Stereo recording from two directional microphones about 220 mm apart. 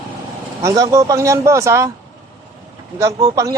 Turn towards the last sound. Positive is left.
turn(degrees=-15)  # may be behind; listen again after turning